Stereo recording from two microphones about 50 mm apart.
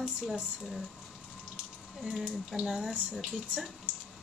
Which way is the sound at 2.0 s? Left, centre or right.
Right.